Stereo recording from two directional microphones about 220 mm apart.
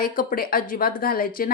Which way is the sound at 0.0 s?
40° left (ahead or behind).